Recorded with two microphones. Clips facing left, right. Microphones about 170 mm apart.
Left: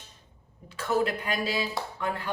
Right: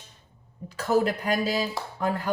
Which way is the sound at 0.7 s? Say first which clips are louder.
Right 3 dB; 40° right (ahead or behind).